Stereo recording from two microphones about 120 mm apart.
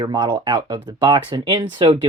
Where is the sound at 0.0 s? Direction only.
40° right (ahead or behind).